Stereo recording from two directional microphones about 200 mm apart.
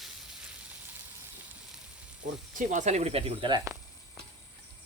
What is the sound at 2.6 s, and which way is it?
Speech, 40° right (ahead or behind).